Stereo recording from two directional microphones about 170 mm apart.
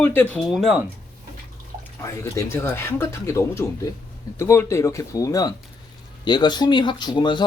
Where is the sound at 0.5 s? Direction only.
Centre (ahead or behind).